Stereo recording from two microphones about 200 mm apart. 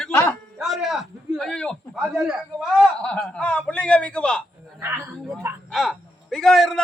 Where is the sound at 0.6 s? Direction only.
Centre (ahead or behind).